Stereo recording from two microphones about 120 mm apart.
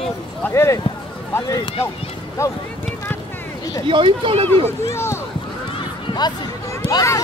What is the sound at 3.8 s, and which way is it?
Speech, 45° right (ahead or behind).